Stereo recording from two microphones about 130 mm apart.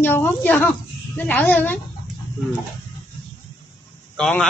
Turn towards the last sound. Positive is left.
turn(degrees=5)  # may be behind; listen again after turning